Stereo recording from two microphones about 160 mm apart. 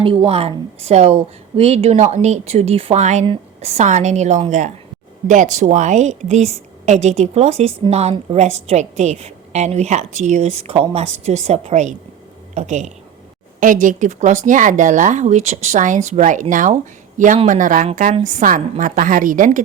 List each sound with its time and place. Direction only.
0.0 s a woman's voice: 35° right (ahead or behind); by 19.5 s 55° right (ahead or behind)